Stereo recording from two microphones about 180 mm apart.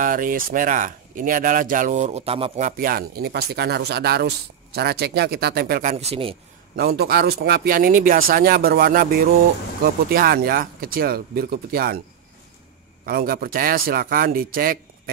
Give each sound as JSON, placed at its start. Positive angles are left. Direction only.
{"t": 0.0, "sound": "speech", "side_deg": -50}
{"t": 2.8, "sound": "speech", "side_deg": -55}
{"t": 6.8, "sound": "speech", "side_deg": -60}
{"t": 13.0, "sound": "speech", "side_deg": -55}